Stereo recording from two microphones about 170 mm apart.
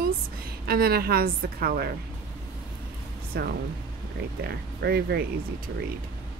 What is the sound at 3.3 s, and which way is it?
Speech, 70° right (ahead or behind).